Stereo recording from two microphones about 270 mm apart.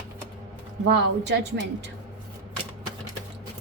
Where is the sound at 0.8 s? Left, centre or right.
Right.